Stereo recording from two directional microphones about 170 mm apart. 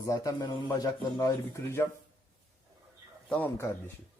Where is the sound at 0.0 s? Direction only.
20° left (ahead or behind).